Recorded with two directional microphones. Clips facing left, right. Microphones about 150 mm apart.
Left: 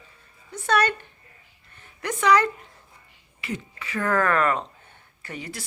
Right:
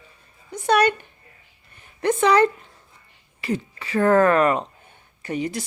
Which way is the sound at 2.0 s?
30° right (ahead or behind).